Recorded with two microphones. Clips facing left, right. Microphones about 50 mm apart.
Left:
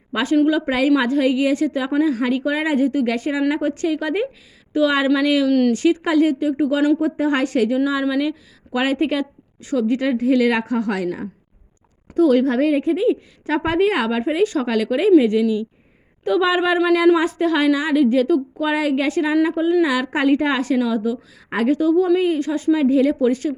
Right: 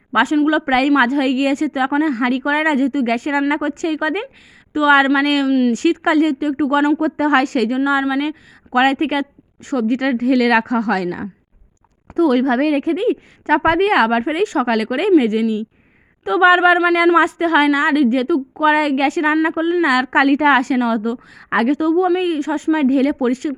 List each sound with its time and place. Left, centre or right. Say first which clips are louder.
0.1 s a woman's voice: right 2 dB; right
5.1 s a woman's voice: right 1 dB; right
5.5 s speech: right 1 dB; centre
5.7 s a woman's voice: right 2 dB; right
7.0 s a woman's voice: right 4 dB; right
8.2 s a woman's voice: even; right
12.1 s a woman's voice: right 1 dB; right
14.4 s a woman's voice: right 1 dB; right
14.7 s a woman's voice: right 1 dB; right
15.2 s a woman's voice: even; right
16.7 s a woman's voice: right 2 dB; right
21.7 s a woman's voice: left 1 dB; right